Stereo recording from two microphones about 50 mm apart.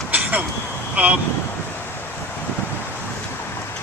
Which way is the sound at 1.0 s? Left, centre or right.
Right.